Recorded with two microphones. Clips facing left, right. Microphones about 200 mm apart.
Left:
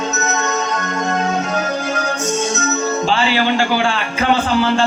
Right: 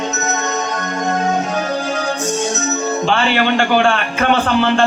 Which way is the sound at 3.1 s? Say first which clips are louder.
Right 2 dB; 60° right (ahead or behind).